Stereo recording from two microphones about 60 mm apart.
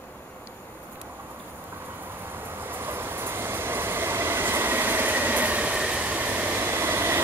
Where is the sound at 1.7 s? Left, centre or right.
Right.